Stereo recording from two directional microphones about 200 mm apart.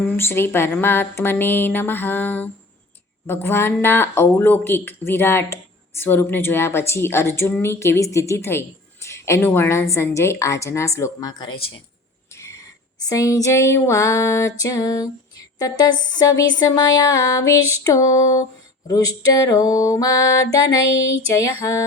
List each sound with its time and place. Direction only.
0.2 s a woman's voice: 10° left (ahead or behind)
12.3 s cricket: 15° left (ahead or behind)
13.1 s a woman's voice: 15° left (ahead or behind)